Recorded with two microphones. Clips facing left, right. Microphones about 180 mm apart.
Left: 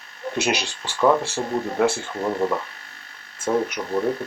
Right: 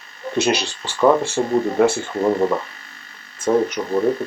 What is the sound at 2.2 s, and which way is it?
Speech, 20° right (ahead or behind).